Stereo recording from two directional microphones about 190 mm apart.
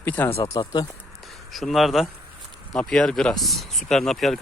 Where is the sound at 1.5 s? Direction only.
Centre (ahead or behind).